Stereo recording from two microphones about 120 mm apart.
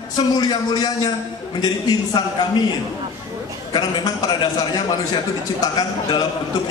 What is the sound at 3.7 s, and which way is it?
A man's voice, 35° left (ahead or behind).